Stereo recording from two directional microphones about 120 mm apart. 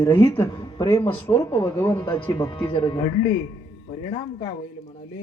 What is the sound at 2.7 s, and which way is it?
Music, 45° left (ahead or behind).